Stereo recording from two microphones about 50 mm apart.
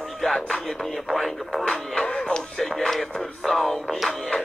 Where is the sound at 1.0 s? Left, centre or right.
Centre.